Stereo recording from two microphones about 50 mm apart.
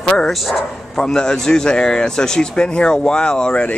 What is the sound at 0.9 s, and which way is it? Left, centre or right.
Speech, centre.